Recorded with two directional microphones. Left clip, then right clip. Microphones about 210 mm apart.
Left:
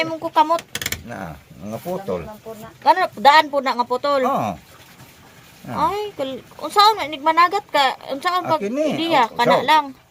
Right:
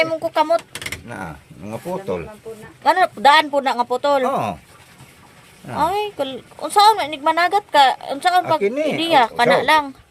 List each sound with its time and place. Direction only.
0.0 s a woman's voice: 15° right (ahead or behind)
2.8 s a woman's voice: 15° right (ahead or behind)
5.6 s a woman's voice: 15° right (ahead or behind)